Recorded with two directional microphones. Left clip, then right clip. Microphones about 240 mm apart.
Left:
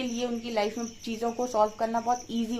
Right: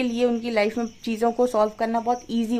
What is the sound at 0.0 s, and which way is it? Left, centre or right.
Speech, right.